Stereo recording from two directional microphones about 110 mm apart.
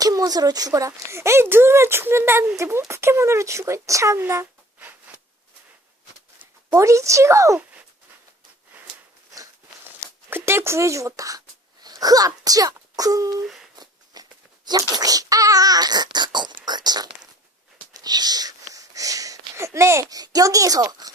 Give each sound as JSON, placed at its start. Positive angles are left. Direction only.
{"t": 0.0, "sound": "speech", "side_deg": -35}
{"t": 6.7, "sound": "speech", "side_deg": -30}
{"t": 9.8, "sound": "a sound", "side_deg": -20}
{"t": 17.9, "sound": "speech", "side_deg": -35}